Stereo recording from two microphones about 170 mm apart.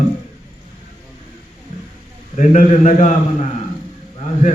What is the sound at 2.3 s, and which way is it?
Speech, 45° left (ahead or behind).